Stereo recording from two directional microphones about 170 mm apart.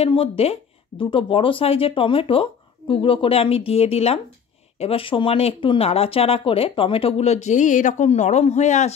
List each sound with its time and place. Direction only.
0.0 s speech: 35° left (ahead or behind)